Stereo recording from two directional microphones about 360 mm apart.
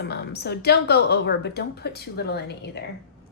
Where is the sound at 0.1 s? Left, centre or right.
Left.